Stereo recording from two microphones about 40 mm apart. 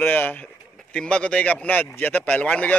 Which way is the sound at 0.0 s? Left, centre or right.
Left.